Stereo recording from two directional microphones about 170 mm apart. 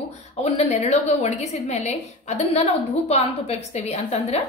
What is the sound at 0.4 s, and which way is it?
A woman's voice, 40° left (ahead or behind).